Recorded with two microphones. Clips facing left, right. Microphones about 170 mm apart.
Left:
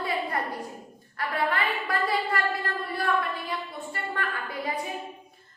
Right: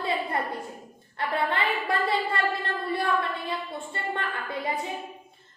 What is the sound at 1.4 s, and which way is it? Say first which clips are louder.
A woman's voice: right 1 dB; 25° right (ahead or behind).